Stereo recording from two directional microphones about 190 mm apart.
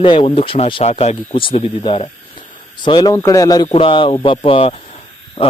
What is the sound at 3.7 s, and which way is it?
Speech, 30° left (ahead or behind).